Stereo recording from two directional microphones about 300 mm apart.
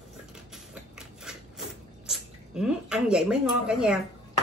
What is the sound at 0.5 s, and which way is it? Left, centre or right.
Mechanisms, centre.